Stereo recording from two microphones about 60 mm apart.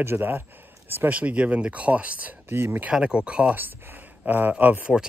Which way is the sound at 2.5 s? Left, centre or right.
Right.